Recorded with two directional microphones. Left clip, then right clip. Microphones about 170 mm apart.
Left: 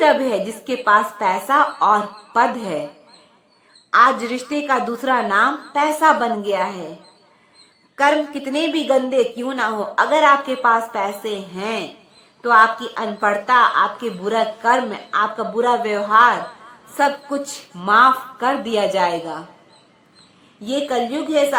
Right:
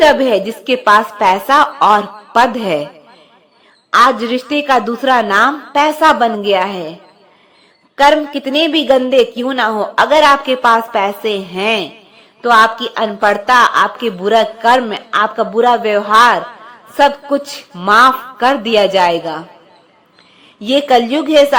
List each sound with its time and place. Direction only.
0.0 s speech: 25° right (ahead or behind)
3.9 s speech: 30° right (ahead or behind)
8.0 s speech: 30° right (ahead or behind)
20.8 s a woman's voice: 35° right (ahead or behind)